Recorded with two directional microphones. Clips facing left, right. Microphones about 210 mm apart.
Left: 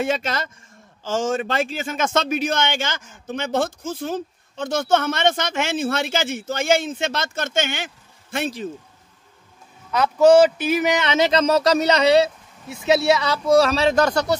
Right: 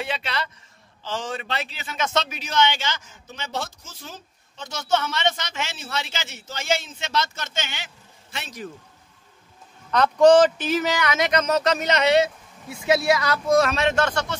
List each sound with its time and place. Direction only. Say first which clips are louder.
0.0 s a man's voice: left 6 dB; 45° left (ahead or behind)
9.8 s speech: left 1 dB; 5° left (ahead or behind); by 14.3 s 40° left (ahead or behind)